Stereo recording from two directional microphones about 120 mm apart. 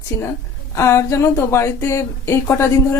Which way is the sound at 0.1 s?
20° left (ahead or behind).